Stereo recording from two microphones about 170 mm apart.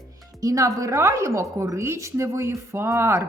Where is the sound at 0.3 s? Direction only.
20° right (ahead or behind).